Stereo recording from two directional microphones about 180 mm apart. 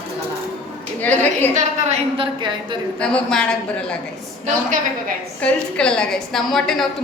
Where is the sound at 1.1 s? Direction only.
10° left (ahead or behind).